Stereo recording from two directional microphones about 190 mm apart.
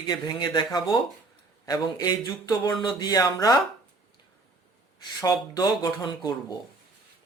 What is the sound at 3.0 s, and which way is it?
Speech, 20° left (ahead or behind).